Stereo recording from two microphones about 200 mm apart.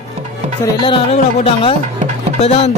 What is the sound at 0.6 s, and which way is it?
Chopping, 25° left (ahead or behind).